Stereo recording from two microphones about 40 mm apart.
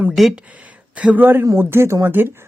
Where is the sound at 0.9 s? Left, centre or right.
Right.